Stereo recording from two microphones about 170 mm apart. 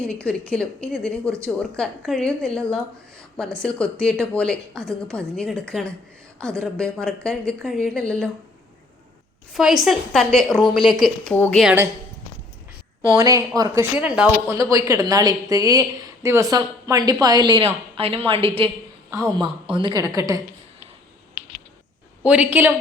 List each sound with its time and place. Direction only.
0.0 s a woman's voice: 5° left (ahead or behind)
9.5 s a woman's voice: centre (ahead or behind)
11.3 s speech: 10° left (ahead or behind)
11.6 s a woman's voice: 10° right (ahead or behind)
13.1 s a woman's voice: 20° right (ahead or behind)
13.9 s a woman's voice: 5° right (ahead or behind)
14.5 s a woman's voice: 20° right (ahead or behind)
19.1 s a woman's voice: 20° right (ahead or behind)
19.6 s a woman's voice: 30° right (ahead or behind)
22.2 s a woman's voice: 10° right (ahead or behind)